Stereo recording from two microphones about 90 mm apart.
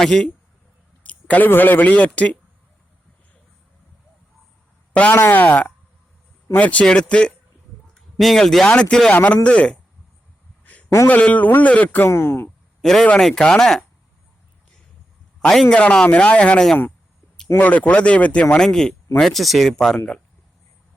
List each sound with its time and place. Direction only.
0.0 s speech: 5° left (ahead or behind)
1.0 s speech: 20° left (ahead or behind)
5.1 s a man's voice: 20° left (ahead or behind)
10.6 s a sound: 15° left (ahead or behind)
10.8 s speech: 35° left (ahead or behind)
11.1 s speech: 15° left (ahead or behind)
12.0 s speech: 30° left (ahead or behind)
12.8 s speech: 5° left (ahead or behind)
15.4 s speech: 10° left (ahead or behind)